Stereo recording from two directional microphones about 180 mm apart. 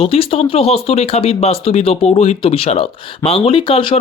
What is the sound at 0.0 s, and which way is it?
Speech, 30° left (ahead or behind).